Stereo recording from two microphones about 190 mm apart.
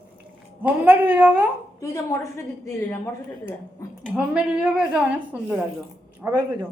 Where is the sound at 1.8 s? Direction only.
15° left (ahead or behind).